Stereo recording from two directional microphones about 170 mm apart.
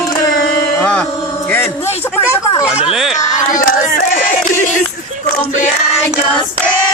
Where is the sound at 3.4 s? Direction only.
50° left (ahead or behind).